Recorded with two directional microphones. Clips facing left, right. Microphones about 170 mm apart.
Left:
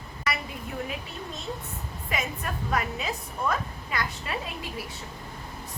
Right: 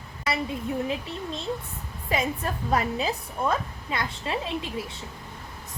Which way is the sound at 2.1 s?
30° right (ahead or behind).